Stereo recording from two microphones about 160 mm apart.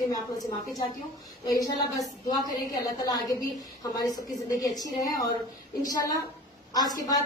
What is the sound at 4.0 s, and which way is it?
A woman's voice, 25° left (ahead or behind).